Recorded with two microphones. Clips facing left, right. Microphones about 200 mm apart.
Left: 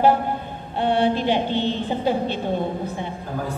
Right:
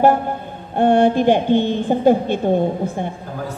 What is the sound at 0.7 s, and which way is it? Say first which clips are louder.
A woman's voice: right 6 dB; 50° right (ahead or behind).